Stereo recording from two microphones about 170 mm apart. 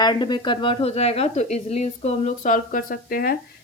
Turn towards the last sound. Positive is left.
turn(degrees=60)  # may be behind; listen again after turning